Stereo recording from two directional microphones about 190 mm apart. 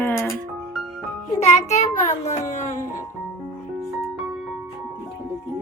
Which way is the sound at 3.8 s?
Centre (ahead or behind).